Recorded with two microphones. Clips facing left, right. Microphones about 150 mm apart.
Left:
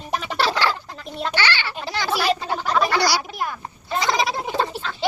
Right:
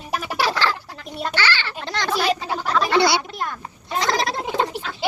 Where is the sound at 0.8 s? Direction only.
5° right (ahead or behind).